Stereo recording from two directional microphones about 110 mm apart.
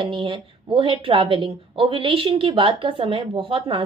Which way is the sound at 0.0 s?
50° right (ahead or behind).